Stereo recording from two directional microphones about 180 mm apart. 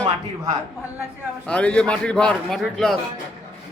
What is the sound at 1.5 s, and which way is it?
A man's voice, 5° left (ahead or behind).